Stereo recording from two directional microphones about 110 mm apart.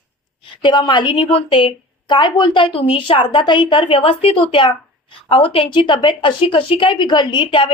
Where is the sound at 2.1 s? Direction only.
45° left (ahead or behind).